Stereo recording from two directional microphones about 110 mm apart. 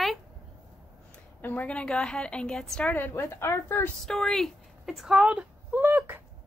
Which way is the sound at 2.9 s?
20° left (ahead or behind).